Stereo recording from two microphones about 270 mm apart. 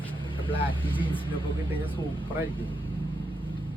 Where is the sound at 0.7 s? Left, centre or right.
Centre.